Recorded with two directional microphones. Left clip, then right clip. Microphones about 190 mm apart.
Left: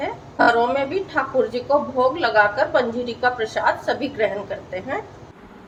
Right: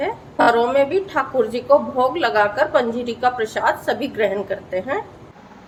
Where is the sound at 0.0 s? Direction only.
35° right (ahead or behind).